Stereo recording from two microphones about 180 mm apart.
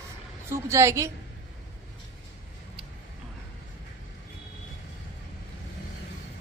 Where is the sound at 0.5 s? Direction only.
15° right (ahead or behind).